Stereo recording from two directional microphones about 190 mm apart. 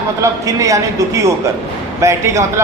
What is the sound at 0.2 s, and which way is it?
A man's voice, 15° right (ahead or behind).